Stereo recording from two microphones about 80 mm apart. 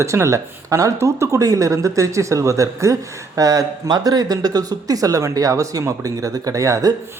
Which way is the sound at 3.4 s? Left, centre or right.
Right.